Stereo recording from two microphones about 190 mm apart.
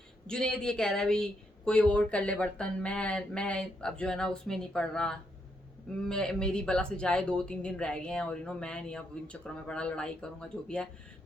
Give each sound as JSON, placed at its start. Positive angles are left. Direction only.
{"t": 0.3, "sound": "speech", "side_deg": 5}